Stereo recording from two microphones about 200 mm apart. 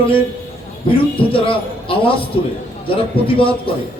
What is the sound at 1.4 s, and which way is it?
Speech, 25° left (ahead or behind).